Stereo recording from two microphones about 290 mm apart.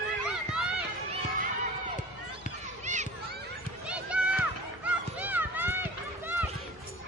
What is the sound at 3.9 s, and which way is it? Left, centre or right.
Run, centre.